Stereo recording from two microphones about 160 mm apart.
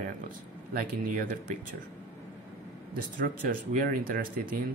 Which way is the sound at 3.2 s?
60° right (ahead or behind).